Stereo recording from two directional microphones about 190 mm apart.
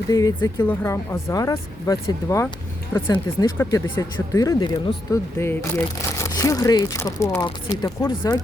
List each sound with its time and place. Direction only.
0.1 s speech: 20° left (ahead or behind)